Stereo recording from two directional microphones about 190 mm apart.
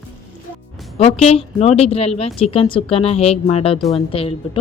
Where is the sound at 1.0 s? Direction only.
30° left (ahead or behind).